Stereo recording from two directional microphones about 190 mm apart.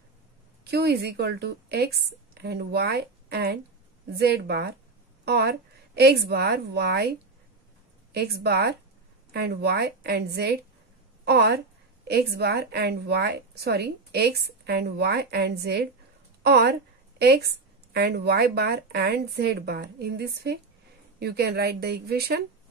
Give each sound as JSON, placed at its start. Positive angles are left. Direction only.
{"t": 0.7, "sound": "a woman's voice", "side_deg": -60}